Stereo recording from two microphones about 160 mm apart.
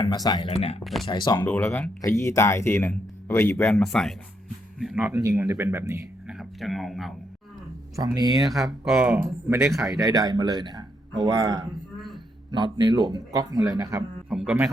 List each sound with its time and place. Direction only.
0.0 s speech: 25° left (ahead or behind)
0.5 s speech: 35° left (ahead or behind)
1.5 s speech: 10° left (ahead or behind)
2.0 s speech: 20° left (ahead or behind)
3.6 s speech: 5° left (ahead or behind)
5.1 s speech: 20° right (ahead or behind)
6.2 s a sound: centre (ahead or behind)
7.9 s speech: 25° right (ahead or behind)
8.4 s speech: centre (ahead or behind)
9.1 s speech: 15° right (ahead or behind)
9.6 s speech: centre (ahead or behind)
10.0 s speech: 20° right (ahead or behind)
14.3 s a man's voice: 5° right (ahead or behind)